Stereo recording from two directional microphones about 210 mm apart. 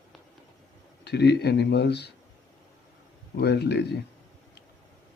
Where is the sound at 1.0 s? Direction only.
50° left (ahead or behind).